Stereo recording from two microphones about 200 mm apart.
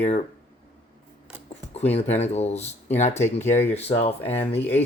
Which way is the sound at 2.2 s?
30° left (ahead or behind).